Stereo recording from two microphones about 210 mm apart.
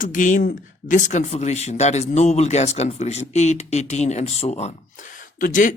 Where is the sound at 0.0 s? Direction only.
40° left (ahead or behind).